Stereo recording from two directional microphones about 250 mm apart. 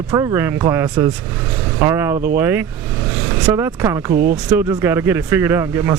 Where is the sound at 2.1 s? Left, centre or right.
Right.